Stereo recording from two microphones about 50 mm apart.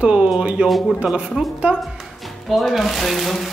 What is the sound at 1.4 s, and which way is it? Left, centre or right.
Speech, centre.